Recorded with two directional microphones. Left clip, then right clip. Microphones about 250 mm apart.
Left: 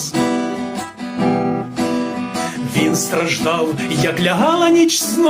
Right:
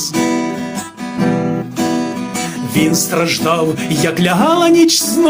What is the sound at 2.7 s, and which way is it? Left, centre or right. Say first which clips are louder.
Music: right 3 dB; right.